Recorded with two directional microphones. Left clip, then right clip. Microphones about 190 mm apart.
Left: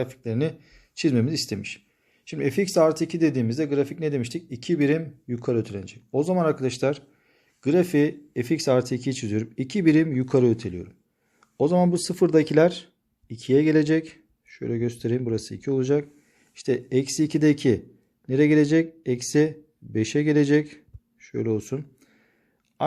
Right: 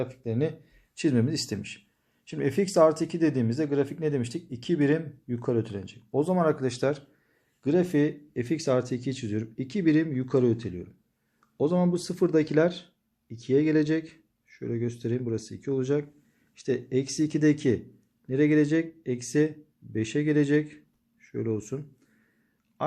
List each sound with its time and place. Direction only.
0.0 s speech: 30° left (ahead or behind)